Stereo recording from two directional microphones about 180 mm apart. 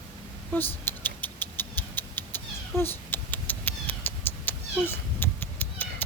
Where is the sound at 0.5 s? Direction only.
10° left (ahead or behind).